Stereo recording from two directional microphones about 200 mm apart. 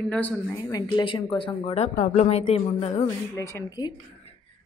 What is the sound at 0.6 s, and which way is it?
Speech, 20° left (ahead or behind).